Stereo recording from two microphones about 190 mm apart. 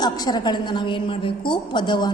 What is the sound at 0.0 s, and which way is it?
A woman's voice, 20° left (ahead or behind).